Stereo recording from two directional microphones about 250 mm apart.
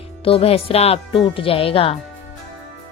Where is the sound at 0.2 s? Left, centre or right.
Left.